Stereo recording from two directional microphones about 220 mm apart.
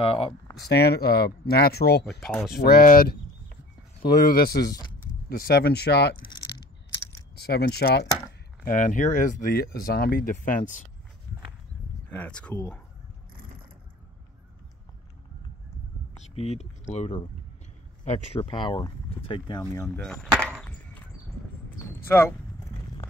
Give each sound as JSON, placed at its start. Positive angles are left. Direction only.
{"t": 0.0, "sound": "speech", "side_deg": 25}
{"t": 0.6, "sound": "speech", "side_deg": 50}
{"t": 2.2, "sound": "speech", "side_deg": 0}
{"t": 2.5, "sound": "speech", "side_deg": 45}
{"t": 4.6, "sound": "speech", "side_deg": 15}
{"t": 5.3, "sound": "speech", "side_deg": 45}
{"t": 6.1, "sound": "coin", "side_deg": 20}
{"t": 7.3, "sound": "speech", "side_deg": 45}
{"t": 12.1, "sound": "speech", "side_deg": 5}
{"t": 16.3, "sound": "speech", "side_deg": 30}
{"t": 20.1, "sound": "chop", "side_deg": 0}
{"t": 21.6, "sound": "a sound", "side_deg": 10}